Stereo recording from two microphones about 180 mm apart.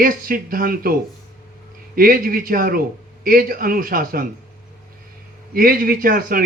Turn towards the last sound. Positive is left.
turn(degrees=-55)  # may be behind; listen again after turning